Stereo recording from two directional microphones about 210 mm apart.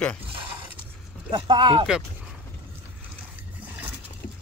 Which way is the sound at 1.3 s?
25° right (ahead or behind).